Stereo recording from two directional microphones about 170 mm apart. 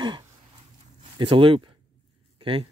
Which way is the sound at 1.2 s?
30° right (ahead or behind).